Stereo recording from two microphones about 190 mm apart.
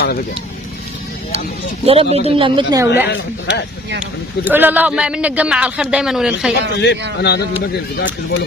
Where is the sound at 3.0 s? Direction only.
60° left (ahead or behind).